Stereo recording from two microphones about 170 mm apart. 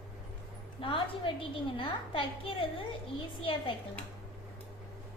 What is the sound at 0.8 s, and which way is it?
A woman's voice, 30° left (ahead or behind).